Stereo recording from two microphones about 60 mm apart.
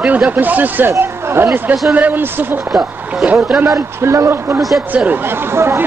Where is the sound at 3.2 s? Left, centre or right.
Right.